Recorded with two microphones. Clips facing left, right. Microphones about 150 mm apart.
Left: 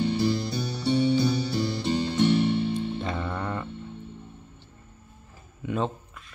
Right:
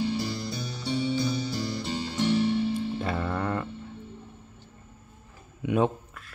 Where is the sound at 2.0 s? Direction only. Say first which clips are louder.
Left 2 dB; 25° left (ahead or behind).